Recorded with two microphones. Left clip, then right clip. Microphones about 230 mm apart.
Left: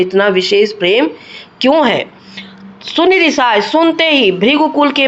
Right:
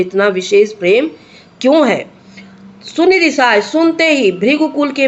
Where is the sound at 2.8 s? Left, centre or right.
Centre.